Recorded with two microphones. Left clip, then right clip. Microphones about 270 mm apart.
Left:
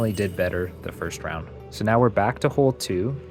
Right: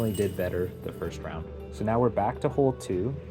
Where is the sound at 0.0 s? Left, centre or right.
Left.